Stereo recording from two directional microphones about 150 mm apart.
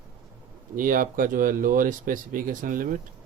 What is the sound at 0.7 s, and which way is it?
Speech, 65° right (ahead or behind).